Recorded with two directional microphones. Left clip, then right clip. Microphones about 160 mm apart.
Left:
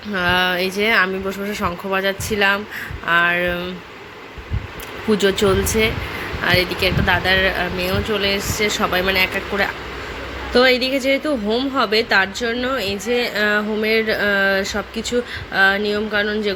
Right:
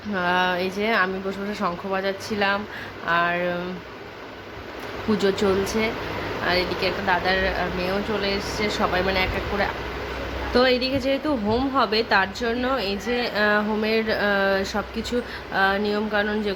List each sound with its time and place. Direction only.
0.1 s speech: 20° left (ahead or behind)
5.1 s speech: 20° left (ahead or behind)